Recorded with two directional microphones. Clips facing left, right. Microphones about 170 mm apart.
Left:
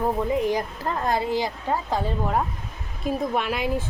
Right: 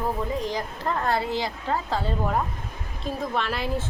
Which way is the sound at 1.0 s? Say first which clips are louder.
Left 3 dB; 15° left (ahead or behind).